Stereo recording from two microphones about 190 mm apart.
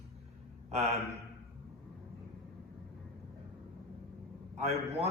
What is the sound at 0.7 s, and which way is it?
Speech, 35° right (ahead or behind).